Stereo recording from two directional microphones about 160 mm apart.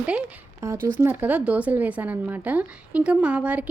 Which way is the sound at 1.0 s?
10° right (ahead or behind).